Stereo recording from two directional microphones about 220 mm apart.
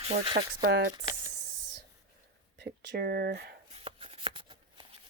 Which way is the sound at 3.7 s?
25° right (ahead or behind).